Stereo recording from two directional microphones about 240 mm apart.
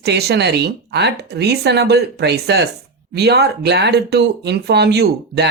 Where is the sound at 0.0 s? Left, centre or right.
Right.